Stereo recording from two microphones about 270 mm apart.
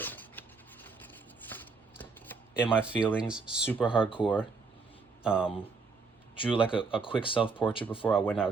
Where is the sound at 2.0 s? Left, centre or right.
Centre.